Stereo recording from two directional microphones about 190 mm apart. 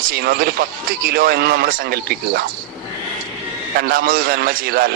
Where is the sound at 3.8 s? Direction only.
50° right (ahead or behind).